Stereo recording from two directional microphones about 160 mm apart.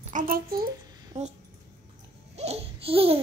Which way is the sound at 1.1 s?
45° right (ahead or behind).